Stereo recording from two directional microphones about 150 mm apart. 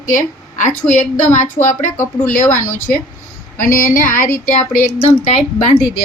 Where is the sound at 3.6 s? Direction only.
70° left (ahead or behind).